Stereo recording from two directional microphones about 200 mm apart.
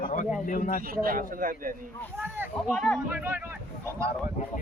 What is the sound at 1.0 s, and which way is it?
Speech, 45° right (ahead or behind).